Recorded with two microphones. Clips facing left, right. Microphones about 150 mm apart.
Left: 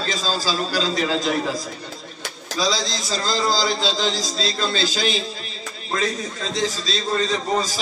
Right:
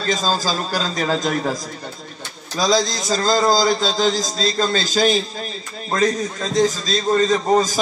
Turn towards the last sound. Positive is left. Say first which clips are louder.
# right 6 dB
turn(degrees=-45)  # may be behind; listen again after turning